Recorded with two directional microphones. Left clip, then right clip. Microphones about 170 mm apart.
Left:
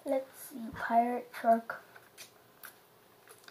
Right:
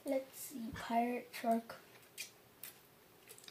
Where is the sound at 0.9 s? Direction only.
35° right (ahead or behind).